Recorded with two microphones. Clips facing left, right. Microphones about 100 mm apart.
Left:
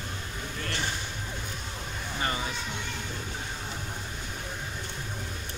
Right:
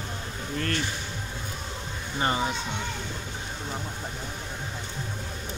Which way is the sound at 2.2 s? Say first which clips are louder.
Right 6 dB; 30° right (ahead or behind).